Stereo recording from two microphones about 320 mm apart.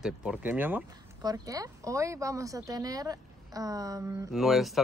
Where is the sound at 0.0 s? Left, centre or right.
Centre.